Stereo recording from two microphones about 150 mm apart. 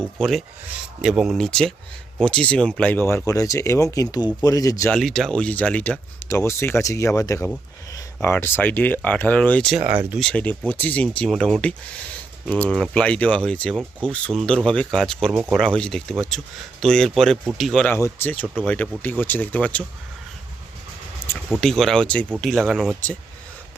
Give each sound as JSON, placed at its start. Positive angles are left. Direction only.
{"t": 0.2, "sound": "speech", "side_deg": 0}
{"t": 4.9, "sound": "speech", "side_deg": 0}
{"t": 17.8, "sound": "speech", "side_deg": 15}
{"t": 21.3, "sound": "speech", "side_deg": 5}